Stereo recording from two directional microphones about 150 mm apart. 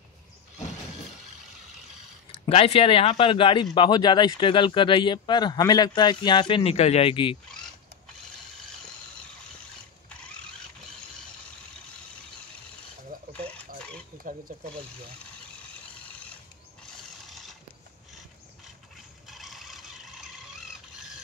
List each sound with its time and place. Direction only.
2.4 s speech: 40° left (ahead or behind)
16.8 s mechanisms: centre (ahead or behind)
19.2 s vehicle: centre (ahead or behind)